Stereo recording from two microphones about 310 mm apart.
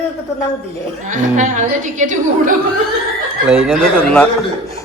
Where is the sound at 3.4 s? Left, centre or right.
Centre.